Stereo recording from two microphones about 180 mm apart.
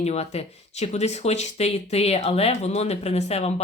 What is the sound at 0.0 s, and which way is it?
Speech, 35° left (ahead or behind).